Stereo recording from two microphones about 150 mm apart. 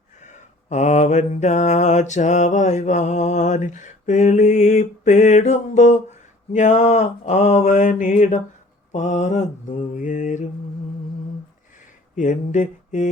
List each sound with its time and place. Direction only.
0.2 s mantra: 55° left (ahead or behind)
12.1 s mantra: 55° left (ahead or behind)